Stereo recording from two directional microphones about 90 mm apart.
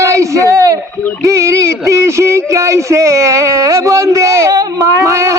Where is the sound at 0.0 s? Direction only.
35° right (ahead or behind).